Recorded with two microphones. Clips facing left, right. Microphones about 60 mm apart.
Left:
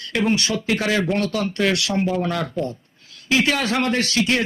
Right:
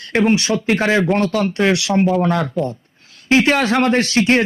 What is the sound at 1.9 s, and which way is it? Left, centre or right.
Speech, right.